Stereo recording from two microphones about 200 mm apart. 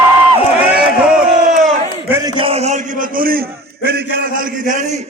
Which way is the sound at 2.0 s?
10° right (ahead or behind).